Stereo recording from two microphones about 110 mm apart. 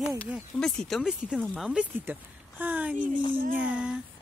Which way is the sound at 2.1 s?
15° right (ahead or behind).